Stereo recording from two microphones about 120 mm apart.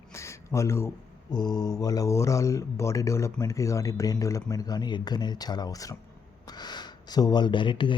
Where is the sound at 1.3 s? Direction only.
35° left (ahead or behind).